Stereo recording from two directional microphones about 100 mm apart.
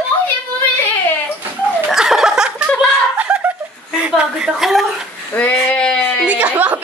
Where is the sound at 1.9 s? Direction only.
5° right (ahead or behind).